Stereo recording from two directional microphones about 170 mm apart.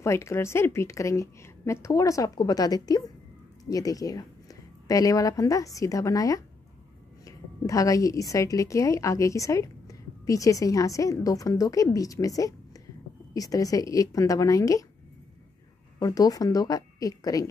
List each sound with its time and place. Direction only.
0.0 s a woman's voice: 15° left (ahead or behind)
16.0 s a woman's voice: 20° left (ahead or behind)